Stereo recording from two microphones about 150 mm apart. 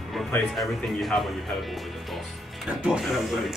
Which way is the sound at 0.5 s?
Centre (ahead or behind).